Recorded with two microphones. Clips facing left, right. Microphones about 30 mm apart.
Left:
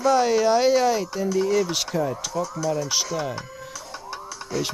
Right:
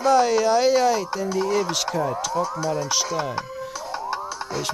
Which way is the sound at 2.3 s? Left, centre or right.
Right.